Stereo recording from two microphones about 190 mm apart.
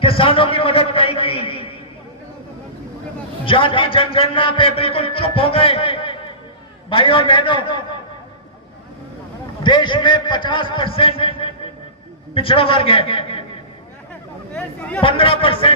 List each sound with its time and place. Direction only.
0.0 s a man's voice: 30° left (ahead or behind)
3.4 s a man's voice: 30° left (ahead or behind)
9.6 s a man's voice: 25° left (ahead or behind)
14.1 s a sound: 5° left (ahead or behind)
15.0 s a man's voice: 30° left (ahead or behind)